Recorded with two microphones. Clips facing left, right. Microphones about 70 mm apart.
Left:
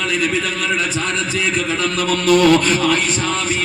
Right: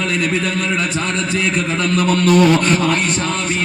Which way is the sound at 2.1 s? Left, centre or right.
Right.